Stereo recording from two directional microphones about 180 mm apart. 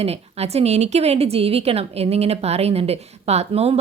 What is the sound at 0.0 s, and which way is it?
A woman's voice, 35° right (ahead or behind).